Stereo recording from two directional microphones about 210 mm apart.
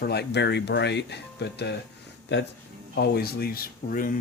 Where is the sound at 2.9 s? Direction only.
50° left (ahead or behind).